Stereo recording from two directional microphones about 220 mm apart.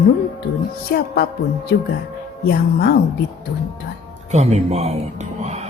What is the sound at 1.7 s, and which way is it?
Speech, 45° left (ahead or behind).